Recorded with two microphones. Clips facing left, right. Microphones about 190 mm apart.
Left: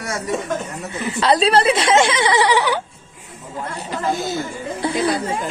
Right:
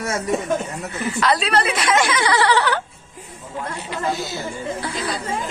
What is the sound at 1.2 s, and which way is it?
A woman's voice, 30° left (ahead or behind).